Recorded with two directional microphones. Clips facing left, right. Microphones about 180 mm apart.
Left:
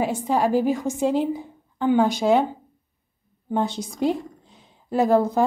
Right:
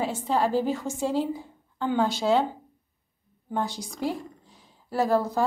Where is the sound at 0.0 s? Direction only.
15° left (ahead or behind).